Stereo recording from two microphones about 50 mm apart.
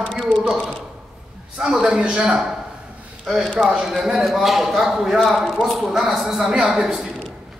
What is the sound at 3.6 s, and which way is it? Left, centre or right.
Speech, centre.